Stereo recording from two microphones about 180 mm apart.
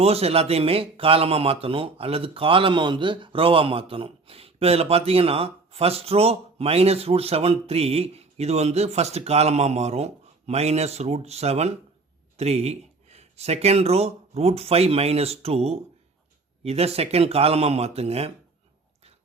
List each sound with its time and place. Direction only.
0.0 s speech: 35° right (ahead or behind)